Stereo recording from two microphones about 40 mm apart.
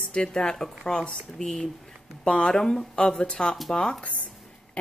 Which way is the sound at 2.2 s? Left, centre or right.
Left.